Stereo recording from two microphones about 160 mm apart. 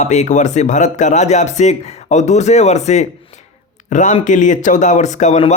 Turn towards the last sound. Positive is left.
turn(degrees=45)  # may be behind; listen again after turning